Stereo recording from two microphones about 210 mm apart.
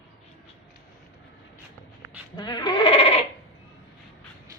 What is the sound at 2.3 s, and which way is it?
Bleat, 20° left (ahead or behind).